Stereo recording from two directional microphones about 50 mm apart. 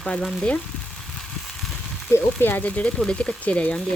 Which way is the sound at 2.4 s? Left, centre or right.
Left.